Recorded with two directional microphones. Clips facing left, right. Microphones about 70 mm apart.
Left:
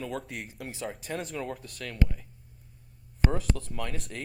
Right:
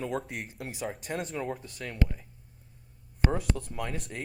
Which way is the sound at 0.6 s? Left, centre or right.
Centre.